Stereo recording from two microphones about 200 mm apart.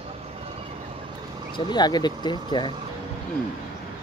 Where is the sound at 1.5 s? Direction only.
25° left (ahead or behind).